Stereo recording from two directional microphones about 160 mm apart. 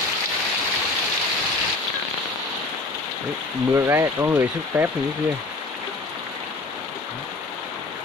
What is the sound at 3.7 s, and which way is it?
Speech, 15° right (ahead or behind).